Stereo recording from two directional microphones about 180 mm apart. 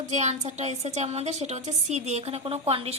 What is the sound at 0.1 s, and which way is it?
A woman's voice, 40° right (ahead or behind).